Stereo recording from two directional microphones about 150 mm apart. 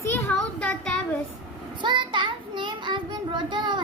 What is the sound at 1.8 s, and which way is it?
A child's voice, 30° right (ahead or behind).